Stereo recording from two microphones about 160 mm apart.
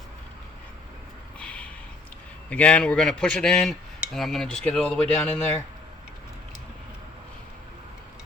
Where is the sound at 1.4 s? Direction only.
10° left (ahead or behind).